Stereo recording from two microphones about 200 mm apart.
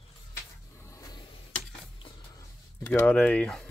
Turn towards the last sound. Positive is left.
turn(degrees=5)  # may be behind; listen again after turning